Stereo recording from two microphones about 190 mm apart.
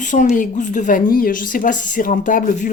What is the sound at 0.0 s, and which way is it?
A woman's voice, 40° left (ahead or behind).